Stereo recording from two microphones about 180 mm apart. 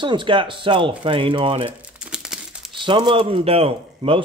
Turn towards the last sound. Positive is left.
turn(degrees=-30)  # may be behind; listen again after turning